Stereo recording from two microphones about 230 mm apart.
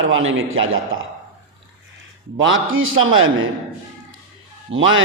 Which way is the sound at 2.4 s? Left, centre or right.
Right.